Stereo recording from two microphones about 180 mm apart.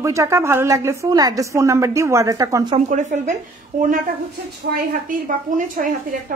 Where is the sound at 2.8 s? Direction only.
45° right (ahead or behind).